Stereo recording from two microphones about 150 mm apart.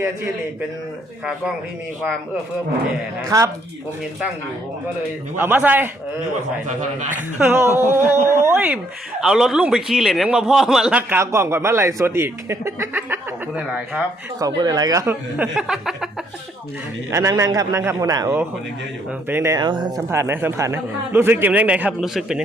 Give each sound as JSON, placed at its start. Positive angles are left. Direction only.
{"t": 3.2, "sound": "a man's voice", "side_deg": -20}
{"t": 5.4, "sound": "a man's voice", "side_deg": -10}
{"t": 7.1, "sound": "a man's voice", "side_deg": -10}
{"t": 7.7, "sound": "a sound", "side_deg": 20}
{"t": 8.3, "sound": "a man's voice", "side_deg": -15}
{"t": 14.3, "sound": "a man's voice", "side_deg": -25}
{"t": 17.1, "sound": "a man's voice", "side_deg": -20}
{"t": 19.6, "sound": "speech", "side_deg": -30}
{"t": 20.0, "sound": "a man's voice", "side_deg": -15}